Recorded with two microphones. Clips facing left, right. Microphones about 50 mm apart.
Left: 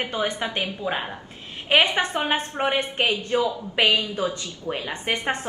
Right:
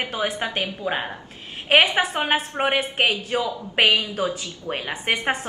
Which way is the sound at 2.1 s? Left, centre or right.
Right.